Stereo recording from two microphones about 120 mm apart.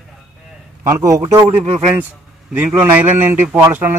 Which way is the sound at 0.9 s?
30° right (ahead or behind).